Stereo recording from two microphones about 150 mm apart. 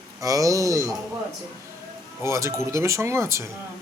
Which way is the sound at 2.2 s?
20° right (ahead or behind).